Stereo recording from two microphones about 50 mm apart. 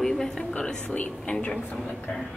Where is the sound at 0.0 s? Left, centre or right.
Centre.